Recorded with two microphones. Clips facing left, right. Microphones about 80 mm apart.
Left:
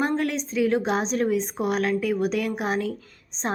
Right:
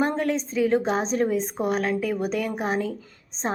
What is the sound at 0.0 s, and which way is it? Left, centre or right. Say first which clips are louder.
A woman's voice: right 1 dB; centre.